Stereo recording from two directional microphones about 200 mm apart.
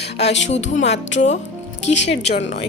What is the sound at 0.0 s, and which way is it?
Music, 55° left (ahead or behind).